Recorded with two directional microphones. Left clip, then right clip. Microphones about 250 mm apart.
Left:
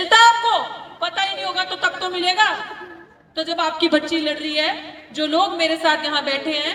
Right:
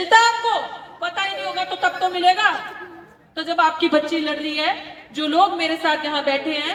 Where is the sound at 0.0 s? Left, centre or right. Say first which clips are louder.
Left 2 dB; left.